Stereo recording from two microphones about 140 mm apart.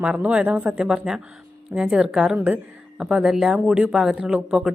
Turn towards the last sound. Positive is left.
turn(degrees=-5)  # may be behind; listen again after turning